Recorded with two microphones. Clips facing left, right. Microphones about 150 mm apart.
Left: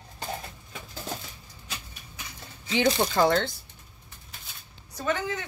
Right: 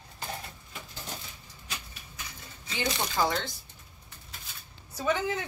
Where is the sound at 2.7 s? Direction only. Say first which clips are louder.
Left 8 dB; 65° left (ahead or behind).